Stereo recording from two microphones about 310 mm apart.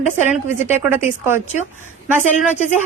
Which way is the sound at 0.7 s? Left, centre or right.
Centre.